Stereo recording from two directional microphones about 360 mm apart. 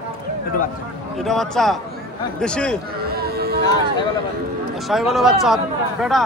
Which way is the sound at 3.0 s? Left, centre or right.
Right.